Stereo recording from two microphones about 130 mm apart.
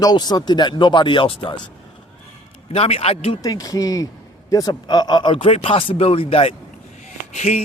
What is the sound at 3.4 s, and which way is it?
Speech, 30° left (ahead or behind).